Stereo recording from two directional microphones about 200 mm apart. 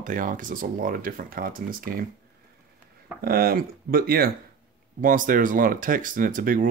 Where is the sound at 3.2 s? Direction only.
50° right (ahead or behind).